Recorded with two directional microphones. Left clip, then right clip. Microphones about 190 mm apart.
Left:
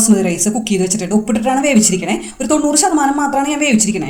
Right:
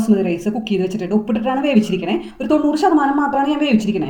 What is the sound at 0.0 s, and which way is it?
A woman's voice, 15° left (ahead or behind).